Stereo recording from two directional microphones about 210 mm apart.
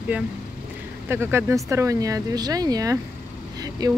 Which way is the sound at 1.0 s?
10° right (ahead or behind).